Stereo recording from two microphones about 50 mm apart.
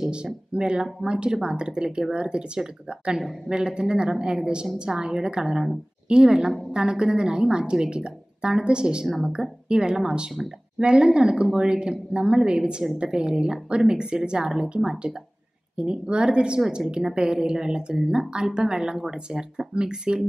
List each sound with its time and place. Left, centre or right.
0.0 s speech: centre
9.0 s a woman's voice: centre
9.3 s speech: centre